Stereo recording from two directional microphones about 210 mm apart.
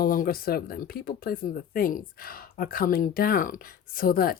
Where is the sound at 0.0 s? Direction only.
45° left (ahead or behind).